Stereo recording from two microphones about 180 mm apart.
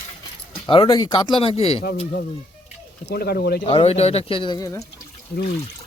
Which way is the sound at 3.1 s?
60° left (ahead or behind).